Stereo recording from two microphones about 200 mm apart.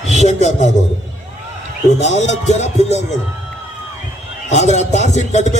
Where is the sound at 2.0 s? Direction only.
35° left (ahead or behind).